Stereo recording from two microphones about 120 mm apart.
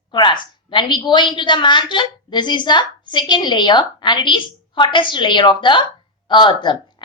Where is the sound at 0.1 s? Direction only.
40° left (ahead or behind).